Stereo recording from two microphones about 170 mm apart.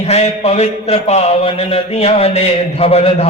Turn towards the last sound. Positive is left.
turn(degrees=35)  # may be behind; listen again after turning